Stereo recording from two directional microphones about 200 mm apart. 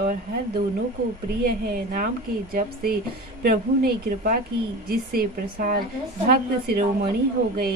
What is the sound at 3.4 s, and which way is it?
A woman's voice, 50° right (ahead or behind).